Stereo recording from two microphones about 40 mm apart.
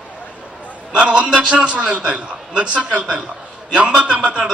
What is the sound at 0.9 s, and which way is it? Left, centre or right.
A man's voice, right.